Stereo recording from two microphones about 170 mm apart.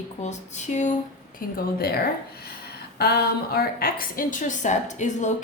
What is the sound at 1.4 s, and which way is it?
Speech, 60° left (ahead or behind).